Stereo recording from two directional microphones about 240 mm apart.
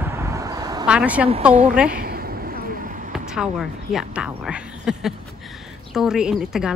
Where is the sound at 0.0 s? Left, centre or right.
Centre.